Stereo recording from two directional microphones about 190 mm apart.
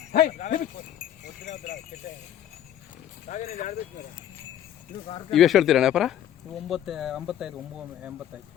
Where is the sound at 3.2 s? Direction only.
45° left (ahead or behind).